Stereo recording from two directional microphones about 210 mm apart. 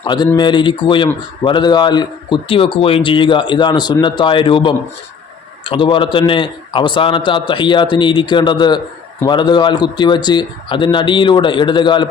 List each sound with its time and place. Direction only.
0.0 s speech: 20° left (ahead or behind)